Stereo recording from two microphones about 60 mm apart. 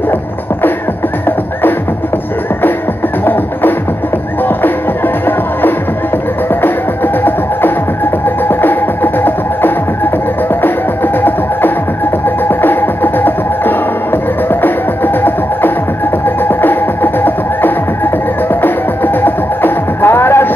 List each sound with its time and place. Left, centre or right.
8.5 s music: left
12.4 s music: left
16.4 s music: left